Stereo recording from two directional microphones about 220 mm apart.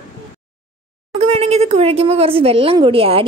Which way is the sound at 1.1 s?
30° right (ahead or behind).